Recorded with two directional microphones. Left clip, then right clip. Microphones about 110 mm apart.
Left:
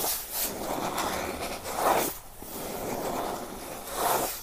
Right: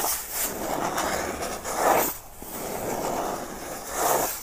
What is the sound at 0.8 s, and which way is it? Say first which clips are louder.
Vehicle: right 4 dB; 35° right (ahead or behind).